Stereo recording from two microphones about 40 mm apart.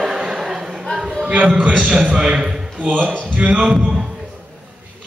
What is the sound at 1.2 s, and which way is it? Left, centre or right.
Music, right.